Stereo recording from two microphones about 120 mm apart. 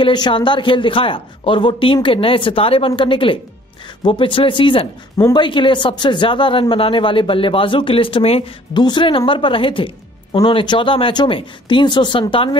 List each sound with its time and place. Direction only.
0.0 s speech: 40° left (ahead or behind)
8.7 s speech: 40° left (ahead or behind)